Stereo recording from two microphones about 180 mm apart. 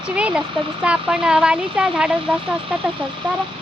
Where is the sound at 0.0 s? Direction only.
5° right (ahead or behind).